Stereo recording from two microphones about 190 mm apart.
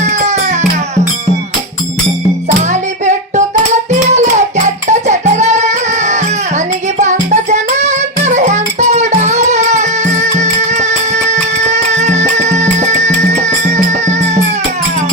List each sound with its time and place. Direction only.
0.0 s music: 35° right (ahead or behind)
4.1 s music: 40° right (ahead or behind)